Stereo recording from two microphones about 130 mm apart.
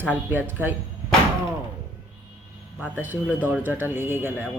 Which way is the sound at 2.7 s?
15° right (ahead or behind).